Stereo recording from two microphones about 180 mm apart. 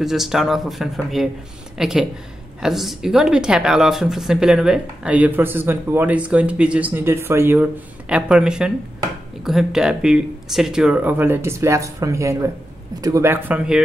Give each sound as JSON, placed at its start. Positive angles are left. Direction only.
{"t": 0.0, "sound": "speech", "side_deg": 0}